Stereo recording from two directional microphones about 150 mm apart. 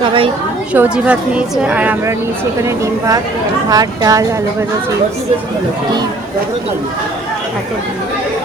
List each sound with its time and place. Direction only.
0.0 s a woman's voice: 35° right (ahead or behind)
0.7 s a woman's voice: 10° right (ahead or behind)